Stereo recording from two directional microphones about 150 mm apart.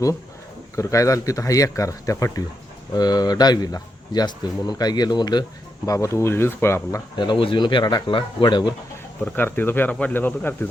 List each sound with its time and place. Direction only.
0.8 s speech: 20° left (ahead or behind)
7.2 s speech: 35° left (ahead or behind)
9.2 s speech: 10° left (ahead or behind)